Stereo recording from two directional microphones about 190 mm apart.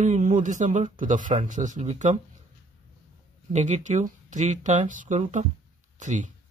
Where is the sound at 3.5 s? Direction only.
40° right (ahead or behind).